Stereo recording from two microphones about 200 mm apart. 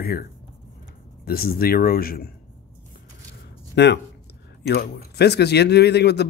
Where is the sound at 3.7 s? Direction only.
60° left (ahead or behind).